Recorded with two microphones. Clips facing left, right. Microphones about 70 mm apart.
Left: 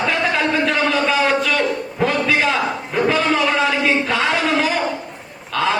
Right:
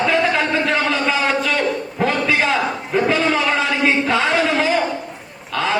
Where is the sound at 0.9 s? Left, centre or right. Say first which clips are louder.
Left 2 dB; right.